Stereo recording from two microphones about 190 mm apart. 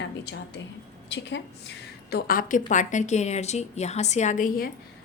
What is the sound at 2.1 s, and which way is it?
A woman's voice, 50° left (ahead or behind).